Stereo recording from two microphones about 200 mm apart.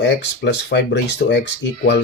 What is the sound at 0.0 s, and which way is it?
Speech, 60° left (ahead or behind).